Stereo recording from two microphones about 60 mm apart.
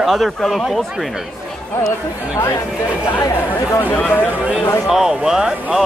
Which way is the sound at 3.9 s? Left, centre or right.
Left.